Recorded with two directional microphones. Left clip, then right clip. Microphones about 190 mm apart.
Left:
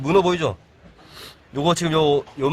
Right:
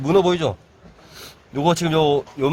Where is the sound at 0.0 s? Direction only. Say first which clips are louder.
Right 1 dB; 20° right (ahead or behind).